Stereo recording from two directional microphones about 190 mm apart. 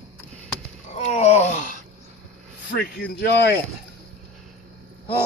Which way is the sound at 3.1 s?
60° left (ahead or behind).